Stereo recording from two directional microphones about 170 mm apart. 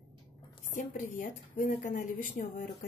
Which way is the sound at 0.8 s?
50° left (ahead or behind).